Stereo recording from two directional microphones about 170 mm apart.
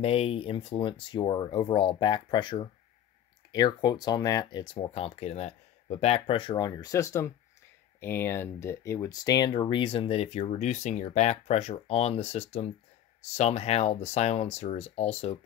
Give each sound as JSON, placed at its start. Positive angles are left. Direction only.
{"t": 0.0, "sound": "speech", "side_deg": 35}